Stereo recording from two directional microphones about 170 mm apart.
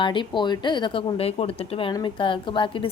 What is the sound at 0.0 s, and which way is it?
A woman's voice, 30° left (ahead or behind).